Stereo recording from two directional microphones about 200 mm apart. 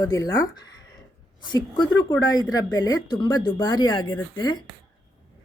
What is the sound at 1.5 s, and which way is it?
Speech, 20° left (ahead or behind).